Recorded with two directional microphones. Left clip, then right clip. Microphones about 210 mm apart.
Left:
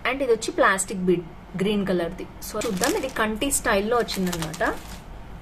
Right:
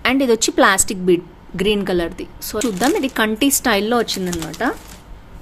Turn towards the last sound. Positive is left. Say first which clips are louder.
# right 4 dB
turn(degrees=-5)  # may be behind; listen again after turning